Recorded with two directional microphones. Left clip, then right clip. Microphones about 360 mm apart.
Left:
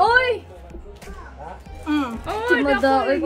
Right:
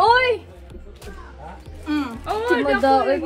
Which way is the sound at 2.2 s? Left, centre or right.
Centre.